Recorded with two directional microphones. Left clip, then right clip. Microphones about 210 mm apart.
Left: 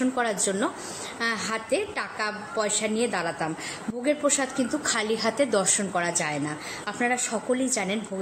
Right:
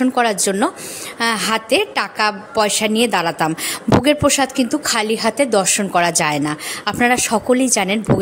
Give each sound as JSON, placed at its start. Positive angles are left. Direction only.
{"t": 0.0, "sound": "a woman's voice", "side_deg": -45}